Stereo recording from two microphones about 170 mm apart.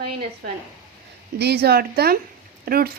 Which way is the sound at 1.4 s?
70° right (ahead or behind).